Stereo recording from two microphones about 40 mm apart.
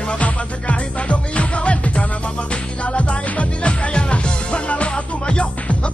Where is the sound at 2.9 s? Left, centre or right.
Left.